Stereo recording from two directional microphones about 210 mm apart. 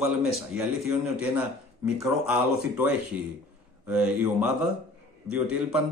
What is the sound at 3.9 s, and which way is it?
A man's voice, 5° right (ahead or behind).